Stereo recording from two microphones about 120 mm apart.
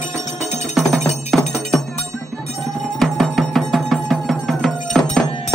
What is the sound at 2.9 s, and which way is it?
Music, 5° left (ahead or behind).